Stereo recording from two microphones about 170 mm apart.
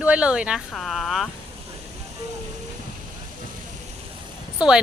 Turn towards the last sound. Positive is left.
turn(degrees=-5)  # may be behind; listen again after turning